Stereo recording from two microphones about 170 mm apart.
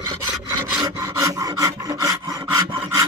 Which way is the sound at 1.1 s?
20° right (ahead or behind).